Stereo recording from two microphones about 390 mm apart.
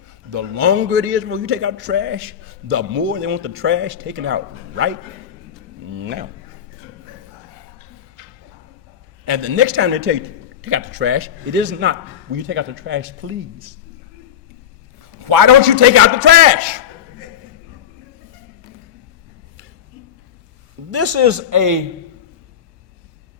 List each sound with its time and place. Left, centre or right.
0.3 s a man's voice: right
0.7 s a man's voice: right
5.9 s speech: right
9.2 s a man's voice: right
15.2 s a man's voice: right
15.4 s a man's voice: right
20.9 s a man's voice: right